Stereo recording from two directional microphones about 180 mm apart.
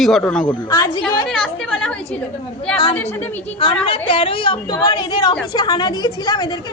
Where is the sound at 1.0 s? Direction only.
Centre (ahead or behind).